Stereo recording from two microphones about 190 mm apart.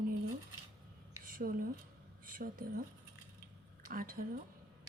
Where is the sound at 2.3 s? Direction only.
45° right (ahead or behind).